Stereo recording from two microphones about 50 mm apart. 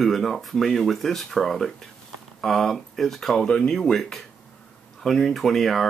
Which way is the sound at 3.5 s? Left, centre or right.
Centre.